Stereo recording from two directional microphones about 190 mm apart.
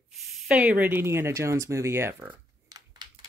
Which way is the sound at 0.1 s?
5° right (ahead or behind).